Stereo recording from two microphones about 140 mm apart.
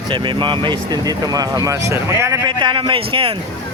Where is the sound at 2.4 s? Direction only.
35° right (ahead or behind).